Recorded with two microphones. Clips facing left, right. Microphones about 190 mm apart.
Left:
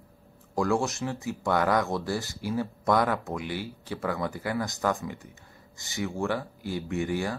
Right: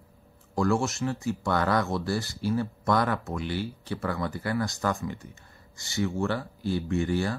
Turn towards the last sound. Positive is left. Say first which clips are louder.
# right 2 dB
turn(degrees=15)  # may be behind; listen again after turning